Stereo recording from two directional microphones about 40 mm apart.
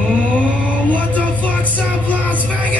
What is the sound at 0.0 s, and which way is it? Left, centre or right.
Music, left.